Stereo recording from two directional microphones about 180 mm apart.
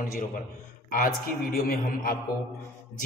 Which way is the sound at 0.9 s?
55° left (ahead or behind).